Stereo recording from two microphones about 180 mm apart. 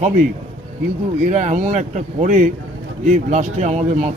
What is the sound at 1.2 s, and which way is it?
Speech, 40° right (ahead or behind).